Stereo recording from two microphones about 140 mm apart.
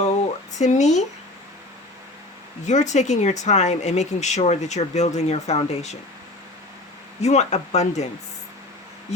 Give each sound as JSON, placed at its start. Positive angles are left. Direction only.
{"t": 0.6, "sound": "speech", "side_deg": 55}
{"t": 2.6, "sound": "speech", "side_deg": 60}
{"t": 7.2, "sound": "speech", "side_deg": 50}